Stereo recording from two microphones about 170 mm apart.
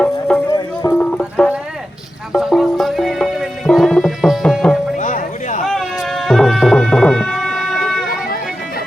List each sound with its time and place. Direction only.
0.0 s music: 5° left (ahead or behind)
0.5 s music: 20° left (ahead or behind)
1.4 s a sound: 5° left (ahead or behind)
2.3 s music: centre (ahead or behind)
4.9 s music: 50° left (ahead or behind)
5.6 s music: centre (ahead or behind)